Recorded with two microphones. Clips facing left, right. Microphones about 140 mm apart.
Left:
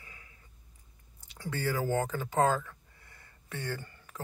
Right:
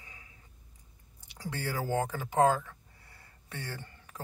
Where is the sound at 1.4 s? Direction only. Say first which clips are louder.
Left 3 dB; 15° right (ahead or behind).